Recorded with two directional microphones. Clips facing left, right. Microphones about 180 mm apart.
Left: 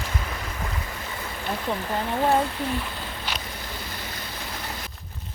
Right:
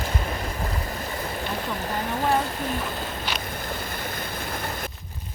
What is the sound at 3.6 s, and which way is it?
Vehicle, 50° right (ahead or behind).